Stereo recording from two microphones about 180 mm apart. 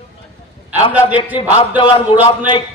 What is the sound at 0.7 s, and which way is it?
Speech, 10° right (ahead or behind).